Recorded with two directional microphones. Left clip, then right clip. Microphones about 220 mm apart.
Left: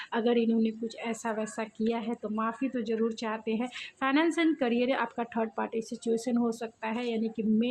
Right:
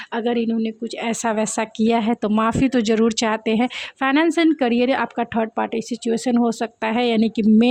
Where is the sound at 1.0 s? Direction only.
35° right (ahead or behind).